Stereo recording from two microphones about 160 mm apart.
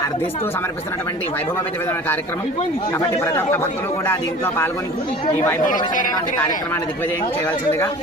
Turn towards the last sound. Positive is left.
turn(degrees=15)  # may be behind; listen again after turning